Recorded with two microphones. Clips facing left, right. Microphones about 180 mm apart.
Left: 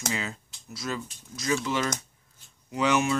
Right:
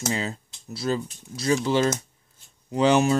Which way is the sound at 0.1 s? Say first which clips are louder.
Right 5 dB; 35° right (ahead or behind).